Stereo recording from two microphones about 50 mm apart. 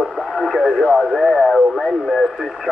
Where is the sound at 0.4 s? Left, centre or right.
Centre.